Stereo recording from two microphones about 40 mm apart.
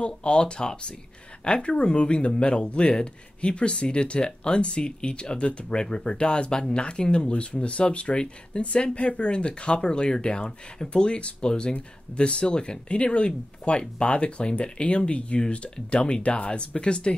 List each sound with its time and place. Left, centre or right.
0.0 s speech: left